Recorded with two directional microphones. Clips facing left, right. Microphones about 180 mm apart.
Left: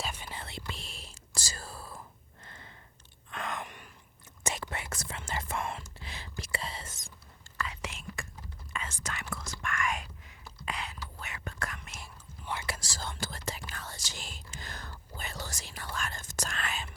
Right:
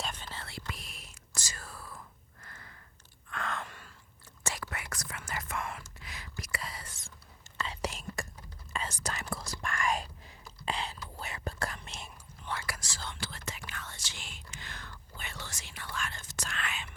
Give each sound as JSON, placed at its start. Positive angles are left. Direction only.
{"t": 0.0, "sound": "whispering", "side_deg": 10}
{"t": 3.2, "sound": "gasp", "side_deg": 20}
{"t": 4.4, "sound": "whispering", "side_deg": 25}
{"t": 7.6, "sound": "whispering", "side_deg": -35}
{"t": 12.5, "sound": "whispering", "side_deg": 20}